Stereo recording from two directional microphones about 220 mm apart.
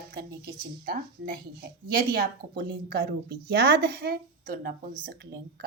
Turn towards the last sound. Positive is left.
turn(degrees=-40)  # may be behind; listen again after turning